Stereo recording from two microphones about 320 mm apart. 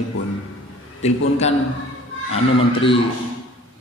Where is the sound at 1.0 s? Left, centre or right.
Centre.